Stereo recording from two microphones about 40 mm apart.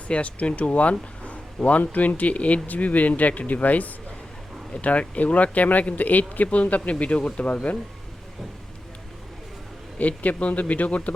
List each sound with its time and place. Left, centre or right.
0.1 s speech: left
10.0 s speech: left